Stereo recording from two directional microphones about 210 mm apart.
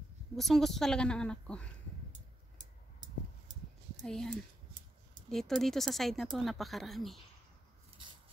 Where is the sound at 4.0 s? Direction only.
5° left (ahead or behind).